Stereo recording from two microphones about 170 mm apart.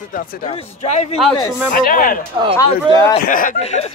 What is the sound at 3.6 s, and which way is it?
Chuckle, 40° left (ahead or behind).